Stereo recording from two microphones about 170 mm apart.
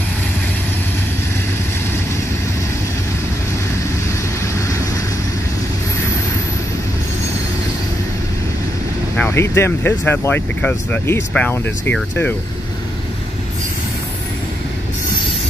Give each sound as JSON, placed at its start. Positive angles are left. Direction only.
{"t": 9.1, "sound": "speech", "side_deg": 10}